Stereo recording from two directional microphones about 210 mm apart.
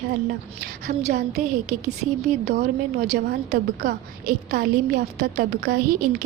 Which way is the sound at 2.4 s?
50° right (ahead or behind).